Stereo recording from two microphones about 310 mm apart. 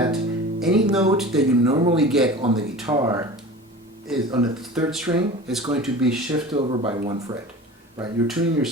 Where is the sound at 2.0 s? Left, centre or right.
Centre.